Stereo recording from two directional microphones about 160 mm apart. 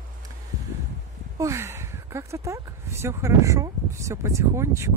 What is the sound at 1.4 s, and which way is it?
Speech, 15° right (ahead or behind).